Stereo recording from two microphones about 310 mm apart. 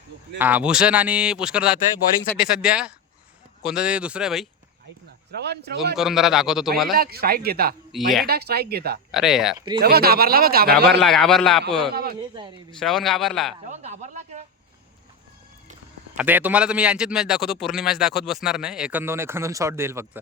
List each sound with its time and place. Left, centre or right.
0.3 s a man's voice: centre
5.3 s speech: right
6.0 s a man's voice: centre
6.9 s speech: right
7.9 s a man's voice: centre
8.3 s speech: right
9.1 s a man's voice: centre
9.8 s speech: right
11.0 s a man's voice: centre
12.8 s a man's voice: centre
13.7 s speech: right
16.1 s a man's voice: centre